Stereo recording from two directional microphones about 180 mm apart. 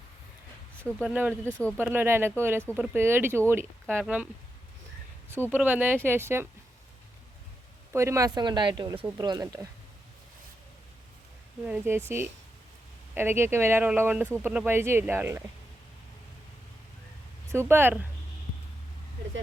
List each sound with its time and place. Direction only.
1.0 s speech: 10° right (ahead or behind)
1.5 s speech: 10° left (ahead or behind)
1.8 s speech: 10° right (ahead or behind)
5.3 s speech: 10° right (ahead or behind)
7.9 s speech: 15° right (ahead or behind)
11.6 s speech: 10° right (ahead or behind)
17.5 s speech: 15° right (ahead or behind)